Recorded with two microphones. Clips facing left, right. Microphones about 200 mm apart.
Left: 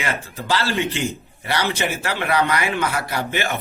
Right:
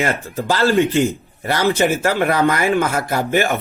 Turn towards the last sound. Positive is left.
turn(degrees=-50)  # may be behind; listen again after turning